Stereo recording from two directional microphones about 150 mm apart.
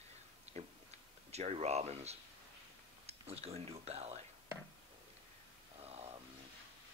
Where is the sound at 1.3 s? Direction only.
45° right (ahead or behind).